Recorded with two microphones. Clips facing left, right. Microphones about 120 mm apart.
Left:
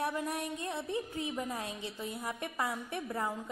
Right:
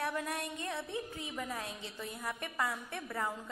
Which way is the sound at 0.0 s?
15° left (ahead or behind).